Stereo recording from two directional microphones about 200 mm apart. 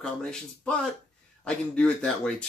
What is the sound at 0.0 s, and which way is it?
Speech, 5° left (ahead or behind).